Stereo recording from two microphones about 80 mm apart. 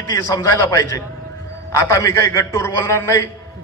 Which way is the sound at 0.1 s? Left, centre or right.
Left.